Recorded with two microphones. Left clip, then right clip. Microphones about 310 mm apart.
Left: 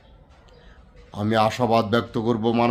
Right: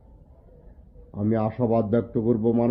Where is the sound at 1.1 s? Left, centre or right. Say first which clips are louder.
Left 6 dB; left.